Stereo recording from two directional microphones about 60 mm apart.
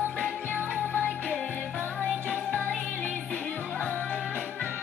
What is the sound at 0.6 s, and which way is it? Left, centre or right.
Music, right.